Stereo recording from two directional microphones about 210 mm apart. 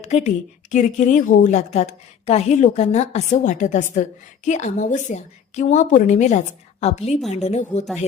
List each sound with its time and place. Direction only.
0.0 s a woman's voice: 30° left (ahead or behind)